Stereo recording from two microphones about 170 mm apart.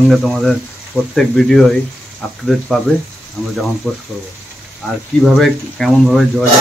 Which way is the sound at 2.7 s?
5° left (ahead or behind).